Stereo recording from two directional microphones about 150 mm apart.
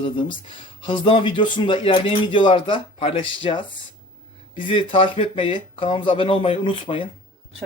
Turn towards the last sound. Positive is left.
turn(degrees=35)  # may be behind; listen again after turning